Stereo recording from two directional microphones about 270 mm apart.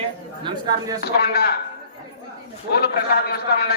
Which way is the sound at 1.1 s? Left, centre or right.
Left.